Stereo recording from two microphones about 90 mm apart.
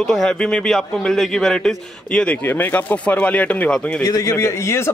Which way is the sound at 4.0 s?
40° left (ahead or behind).